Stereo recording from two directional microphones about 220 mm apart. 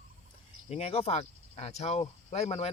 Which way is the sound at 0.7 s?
25° left (ahead or behind).